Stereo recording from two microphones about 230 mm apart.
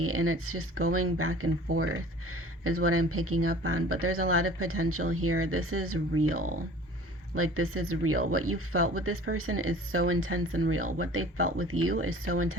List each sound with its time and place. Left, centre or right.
0.0 s speech: right